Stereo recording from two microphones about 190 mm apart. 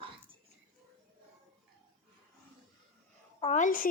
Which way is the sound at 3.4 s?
40° left (ahead or behind).